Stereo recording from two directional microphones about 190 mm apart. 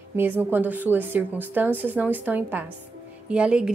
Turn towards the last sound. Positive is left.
turn(degrees=-5)  # may be behind; listen again after turning